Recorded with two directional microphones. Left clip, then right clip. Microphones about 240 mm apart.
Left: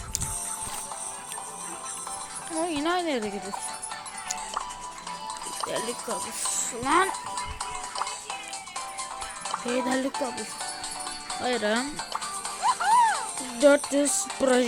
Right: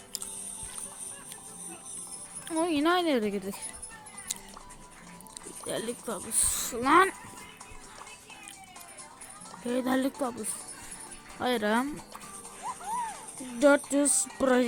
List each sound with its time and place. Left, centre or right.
2.6 s speech: right
5.6 s speech: centre
9.6 s speech: centre
11.3 s speech: centre
12.6 s music: left
13.6 s music: centre